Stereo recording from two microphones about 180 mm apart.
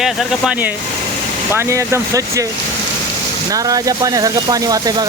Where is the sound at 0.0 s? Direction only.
5° right (ahead or behind).